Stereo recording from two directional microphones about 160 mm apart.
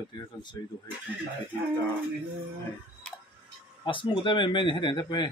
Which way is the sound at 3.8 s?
30° left (ahead or behind).